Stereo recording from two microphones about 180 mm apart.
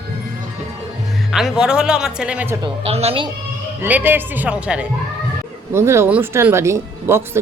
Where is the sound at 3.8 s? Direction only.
10° right (ahead or behind).